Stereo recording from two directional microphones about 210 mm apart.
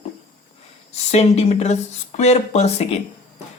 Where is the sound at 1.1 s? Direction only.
30° left (ahead or behind).